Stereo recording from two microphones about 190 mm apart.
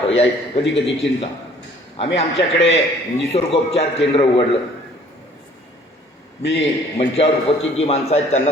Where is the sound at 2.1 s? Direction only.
35° left (ahead or behind).